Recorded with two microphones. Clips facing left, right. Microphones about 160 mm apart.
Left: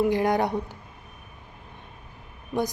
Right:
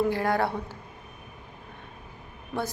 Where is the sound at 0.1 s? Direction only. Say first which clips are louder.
Left 3 dB; 20° left (ahead or behind).